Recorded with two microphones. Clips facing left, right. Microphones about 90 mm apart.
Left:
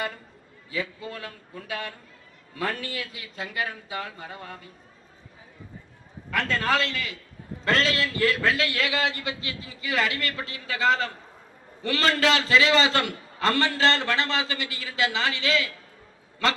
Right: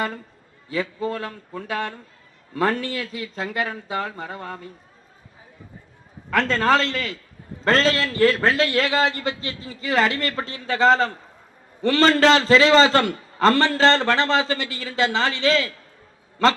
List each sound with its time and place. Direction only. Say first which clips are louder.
0.7 s a man's voice: right 7 dB; 35° right (ahead or behind)
6.3 s a man's voice: right 6 dB; 35° right (ahead or behind)